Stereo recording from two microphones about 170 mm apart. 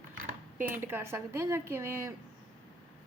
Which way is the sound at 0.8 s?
15° right (ahead or behind).